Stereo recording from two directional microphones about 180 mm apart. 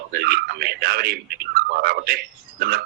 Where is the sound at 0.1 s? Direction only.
60° right (ahead or behind).